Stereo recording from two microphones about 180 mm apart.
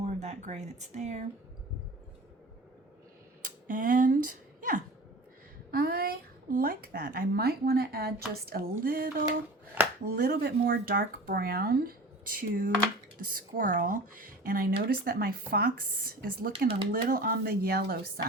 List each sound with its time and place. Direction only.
0.0 s speech: 40° right (ahead or behind)
3.7 s speech: 50° right (ahead or behind)